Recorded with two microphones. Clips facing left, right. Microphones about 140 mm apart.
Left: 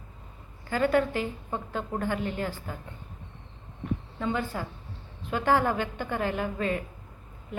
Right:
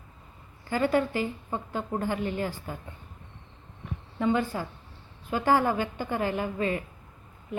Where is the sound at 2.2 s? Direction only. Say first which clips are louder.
Right 1 dB; 50° left (ahead or behind).